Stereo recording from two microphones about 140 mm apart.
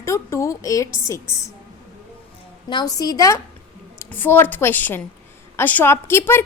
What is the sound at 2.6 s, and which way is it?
A woman's voice, 30° left (ahead or behind).